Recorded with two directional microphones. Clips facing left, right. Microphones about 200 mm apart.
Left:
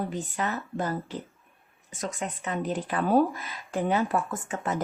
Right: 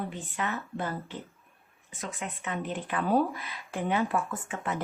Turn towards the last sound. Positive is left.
turn(degrees=40)  # may be behind; listen again after turning